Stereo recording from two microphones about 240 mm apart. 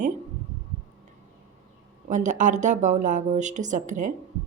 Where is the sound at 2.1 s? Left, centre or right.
Right.